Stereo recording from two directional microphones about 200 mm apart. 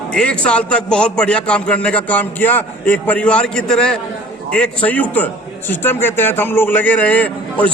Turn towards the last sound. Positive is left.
turn(degrees=5)  # may be behind; listen again after turning